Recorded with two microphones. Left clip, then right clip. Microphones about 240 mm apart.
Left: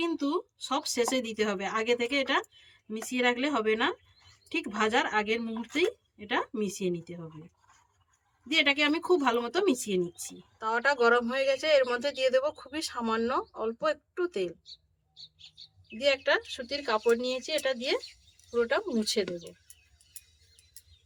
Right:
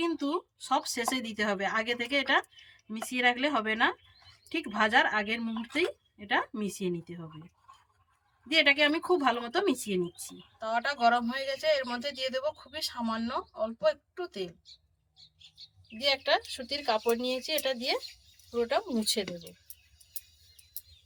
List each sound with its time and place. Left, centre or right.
0.0 s speech: centre
8.4 s speech: centre
10.6 s speech: left
16.2 s speech: centre